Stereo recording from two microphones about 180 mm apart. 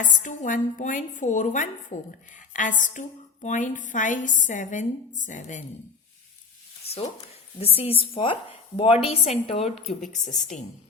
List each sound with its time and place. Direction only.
0.0 s a woman's voice: 45° left (ahead or behind)
6.8 s a sound: 35° left (ahead or behind)
7.6 s a woman's voice: 30° left (ahead or behind)